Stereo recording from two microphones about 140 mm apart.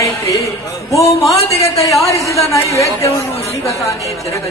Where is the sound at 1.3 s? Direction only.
45° left (ahead or behind).